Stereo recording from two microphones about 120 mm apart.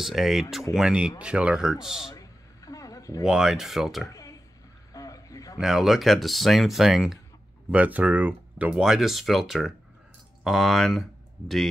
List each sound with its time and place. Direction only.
0.0 s speech: centre (ahead or behind)
2.1 s a sound: 30° left (ahead or behind)
3.3 s speech: 5° right (ahead or behind)
4.1 s a sound: 30° left (ahead or behind)
5.6 s speech: centre (ahead or behind)
7.7 s speech: 10° right (ahead or behind)